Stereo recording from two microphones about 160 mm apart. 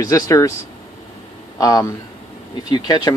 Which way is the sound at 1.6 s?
20° left (ahead or behind).